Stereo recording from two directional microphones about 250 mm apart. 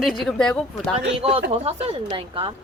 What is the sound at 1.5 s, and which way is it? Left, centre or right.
A woman's voice, right.